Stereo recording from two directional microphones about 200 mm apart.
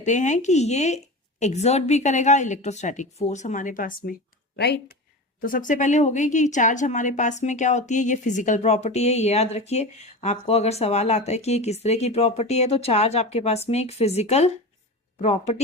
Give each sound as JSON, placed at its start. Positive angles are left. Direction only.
{"t": 0.0, "sound": "speech", "side_deg": 35}
{"t": 4.5, "sound": "speech", "side_deg": 55}
{"t": 5.4, "sound": "speech", "side_deg": 45}